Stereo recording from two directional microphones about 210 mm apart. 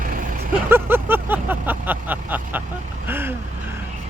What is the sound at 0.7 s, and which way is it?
Vehicle, 10° right (ahead or behind).